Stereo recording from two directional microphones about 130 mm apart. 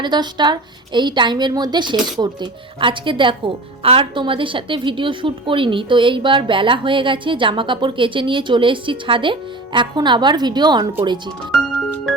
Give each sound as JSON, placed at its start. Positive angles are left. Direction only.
{"t": 0.0, "sound": "a woman's voice", "side_deg": -35}